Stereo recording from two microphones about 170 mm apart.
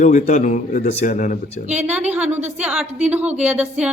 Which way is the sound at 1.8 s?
10° right (ahead or behind).